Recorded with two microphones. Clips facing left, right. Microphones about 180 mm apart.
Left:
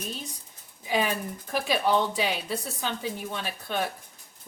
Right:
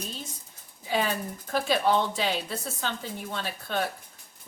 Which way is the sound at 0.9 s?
15° left (ahead or behind).